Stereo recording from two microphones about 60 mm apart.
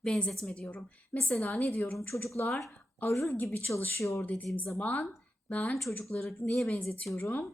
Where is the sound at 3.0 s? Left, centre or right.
Left.